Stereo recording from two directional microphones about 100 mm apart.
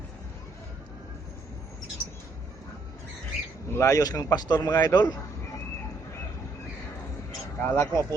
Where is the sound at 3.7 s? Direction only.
30° left (ahead or behind).